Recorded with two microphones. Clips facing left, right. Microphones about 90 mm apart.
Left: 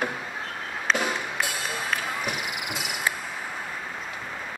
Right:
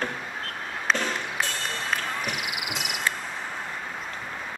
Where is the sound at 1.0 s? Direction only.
10° left (ahead or behind).